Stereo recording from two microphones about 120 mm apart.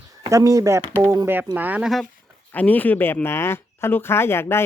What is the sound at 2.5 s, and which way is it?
Speech, 15° left (ahead or behind).